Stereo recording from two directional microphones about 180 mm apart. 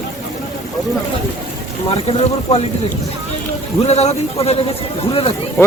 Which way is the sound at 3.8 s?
35° left (ahead or behind).